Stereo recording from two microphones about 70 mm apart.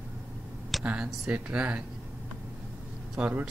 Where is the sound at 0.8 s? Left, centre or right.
Centre.